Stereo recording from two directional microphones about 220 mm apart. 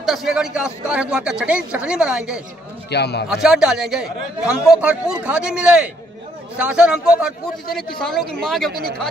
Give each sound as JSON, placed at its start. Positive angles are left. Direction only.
{"t": 0.0, "sound": "a man's voice", "side_deg": 0}
{"t": 2.9, "sound": "a man's voice", "side_deg": 50}
{"t": 3.3, "sound": "a man's voice", "side_deg": 0}